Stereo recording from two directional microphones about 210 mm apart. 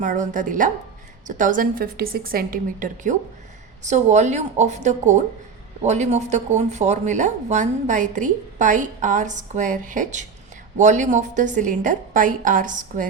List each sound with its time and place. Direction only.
0.0 s speech: 35° right (ahead or behind)